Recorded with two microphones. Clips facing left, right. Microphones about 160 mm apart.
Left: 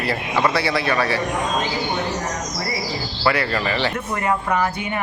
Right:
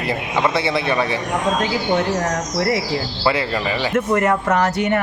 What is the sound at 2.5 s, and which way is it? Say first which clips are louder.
Speech: right 8 dB; 85° right.